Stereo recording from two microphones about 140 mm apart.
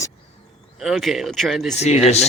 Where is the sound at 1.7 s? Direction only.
50° left (ahead or behind).